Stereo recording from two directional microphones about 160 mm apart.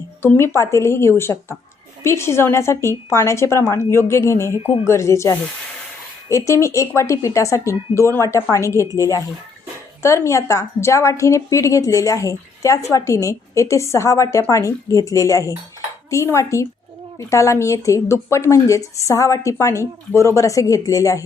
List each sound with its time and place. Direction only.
0.2 s a woman's voice: 15° left (ahead or behind)